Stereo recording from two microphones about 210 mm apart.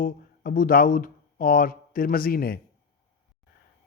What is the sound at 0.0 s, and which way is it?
Speech, 40° left (ahead or behind).